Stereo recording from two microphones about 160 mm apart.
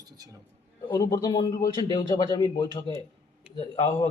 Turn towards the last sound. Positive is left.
turn(degrees=25)  # may be behind; listen again after turning